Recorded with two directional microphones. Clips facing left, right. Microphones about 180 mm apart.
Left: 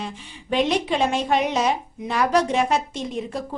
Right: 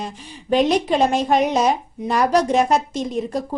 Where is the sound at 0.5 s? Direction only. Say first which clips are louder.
Right 4 dB; 40° right (ahead or behind).